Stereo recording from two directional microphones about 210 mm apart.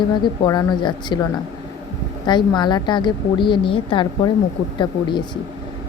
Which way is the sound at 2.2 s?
20° left (ahead or behind).